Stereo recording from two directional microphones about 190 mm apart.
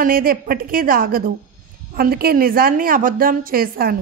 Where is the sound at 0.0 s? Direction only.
50° right (ahead or behind).